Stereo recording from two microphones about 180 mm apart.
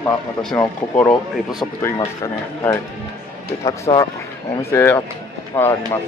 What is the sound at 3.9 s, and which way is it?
A man's voice, 20° left (ahead or behind).